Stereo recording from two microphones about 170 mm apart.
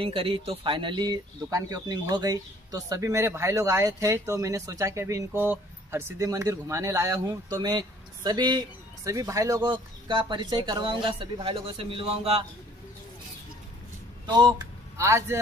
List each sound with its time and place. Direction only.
0.0 s speech: 30° right (ahead or behind)
14.2 s a man's voice: 25° right (ahead or behind)